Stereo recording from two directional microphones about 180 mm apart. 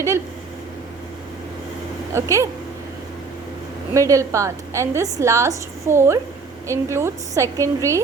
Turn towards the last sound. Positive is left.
turn(degrees=-15)  # may be behind; listen again after turning